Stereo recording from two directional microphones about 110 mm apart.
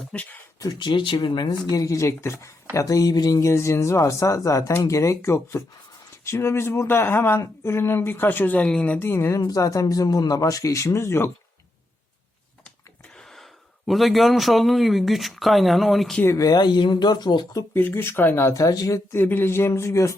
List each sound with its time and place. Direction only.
0.1 s speech: 10° left (ahead or behind)
0.8 s speech: 45° left (ahead or behind)
1.7 s speech: 30° left (ahead or behind)
13.1 s a man's voice: 5° left (ahead or behind)
16.2 s speech: 30° left (ahead or behind)
17.7 s speech: 20° left (ahead or behind)
19.2 s speech: 20° left (ahead or behind)